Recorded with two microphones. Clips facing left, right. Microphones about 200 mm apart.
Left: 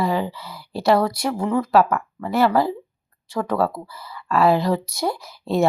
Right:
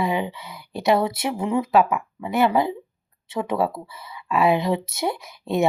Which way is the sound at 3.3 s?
5° right (ahead or behind).